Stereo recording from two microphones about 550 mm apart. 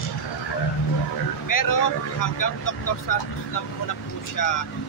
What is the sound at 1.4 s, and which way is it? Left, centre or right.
Speech, left.